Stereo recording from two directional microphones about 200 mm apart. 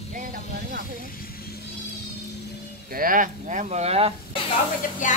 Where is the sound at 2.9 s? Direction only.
45° right (ahead or behind).